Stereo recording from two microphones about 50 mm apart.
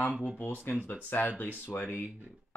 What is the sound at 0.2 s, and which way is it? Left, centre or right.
Speech, left.